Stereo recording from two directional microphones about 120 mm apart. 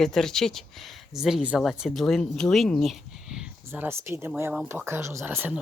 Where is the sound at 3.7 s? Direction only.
20° right (ahead or behind).